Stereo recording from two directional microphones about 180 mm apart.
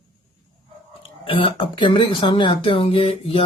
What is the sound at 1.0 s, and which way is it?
Speech, 30° left (ahead or behind).